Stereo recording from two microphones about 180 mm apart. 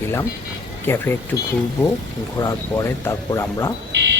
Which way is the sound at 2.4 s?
15° left (ahead or behind).